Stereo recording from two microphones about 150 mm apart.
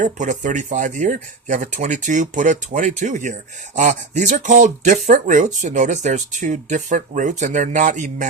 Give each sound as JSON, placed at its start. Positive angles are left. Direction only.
{"t": 0.0, "sound": "speech", "side_deg": -55}